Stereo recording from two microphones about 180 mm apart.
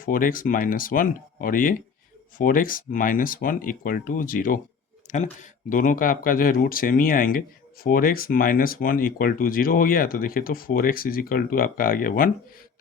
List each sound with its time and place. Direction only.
0.0 s speech: 50° left (ahead or behind)